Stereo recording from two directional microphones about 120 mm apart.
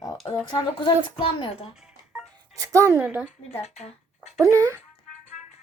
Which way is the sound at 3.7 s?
65° left (ahead or behind).